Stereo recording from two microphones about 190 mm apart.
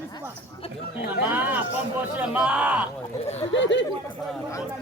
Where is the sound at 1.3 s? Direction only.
10° right (ahead or behind).